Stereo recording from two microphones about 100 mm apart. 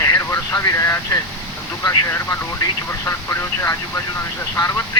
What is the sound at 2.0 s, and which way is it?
Speech, 25° left (ahead or behind).